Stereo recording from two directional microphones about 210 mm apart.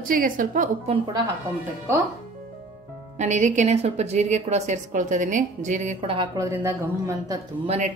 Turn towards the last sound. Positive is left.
turn(degrees=-30)  # may be behind; listen again after turning